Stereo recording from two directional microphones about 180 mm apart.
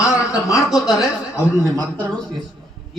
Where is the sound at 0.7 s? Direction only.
Centre (ahead or behind).